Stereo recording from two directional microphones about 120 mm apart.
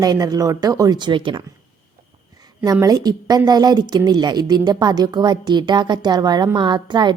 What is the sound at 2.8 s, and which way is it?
A woman's voice, 30° right (ahead or behind).